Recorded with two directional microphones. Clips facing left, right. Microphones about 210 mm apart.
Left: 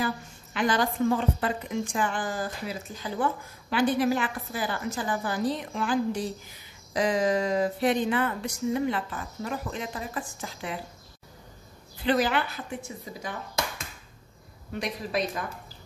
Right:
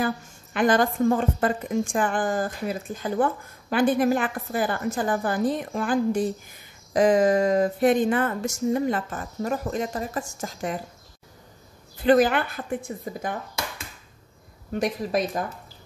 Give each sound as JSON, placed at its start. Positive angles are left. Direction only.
{"t": 0.0, "sound": "a woman's voice", "side_deg": -50}
{"t": 12.0, "sound": "a woman's voice", "side_deg": -50}
{"t": 14.7, "sound": "a woman's voice", "side_deg": -45}